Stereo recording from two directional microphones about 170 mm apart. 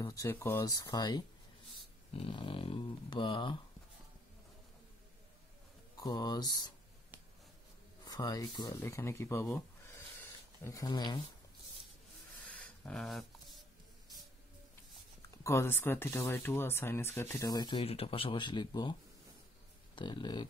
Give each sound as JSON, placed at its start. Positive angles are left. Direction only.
{"t": 0.0, "sound": "speech", "side_deg": 15}
{"t": 0.8, "sound": "speech", "side_deg": 25}
{"t": 5.9, "sound": "speech", "side_deg": 25}
{"t": 8.0, "sound": "speech", "side_deg": 20}
{"t": 10.6, "sound": "speech", "side_deg": 20}
{"t": 12.4, "sound": "a sound", "side_deg": 5}
{"t": 15.3, "sound": "speech", "side_deg": 15}
{"t": 20.0, "sound": "speech", "side_deg": 25}